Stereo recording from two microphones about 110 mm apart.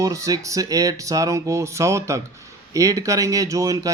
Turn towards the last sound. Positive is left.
turn(degrees=-30)  # may be behind; listen again after turning